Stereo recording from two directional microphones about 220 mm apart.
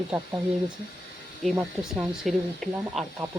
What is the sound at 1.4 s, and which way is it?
Speech, centre (ahead or behind).